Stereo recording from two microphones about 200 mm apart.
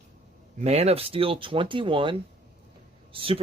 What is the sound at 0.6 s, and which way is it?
Speech, 30° right (ahead or behind).